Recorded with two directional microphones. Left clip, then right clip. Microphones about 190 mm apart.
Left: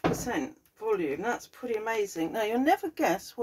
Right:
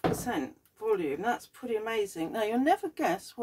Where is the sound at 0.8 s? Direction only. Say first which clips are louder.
Even; 35° right (ahead or behind).